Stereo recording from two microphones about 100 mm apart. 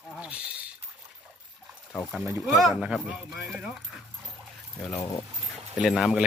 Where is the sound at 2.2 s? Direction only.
25° right (ahead or behind).